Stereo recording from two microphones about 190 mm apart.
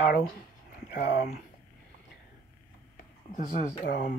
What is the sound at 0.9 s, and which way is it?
Speech, 65° left (ahead or behind).